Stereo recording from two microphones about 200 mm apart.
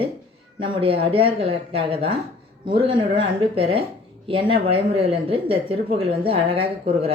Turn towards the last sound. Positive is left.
turn(degrees=-30)  # may be behind; listen again after turning